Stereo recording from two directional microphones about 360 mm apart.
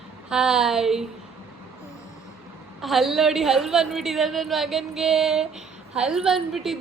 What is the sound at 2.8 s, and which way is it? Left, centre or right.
A woman's voice, centre.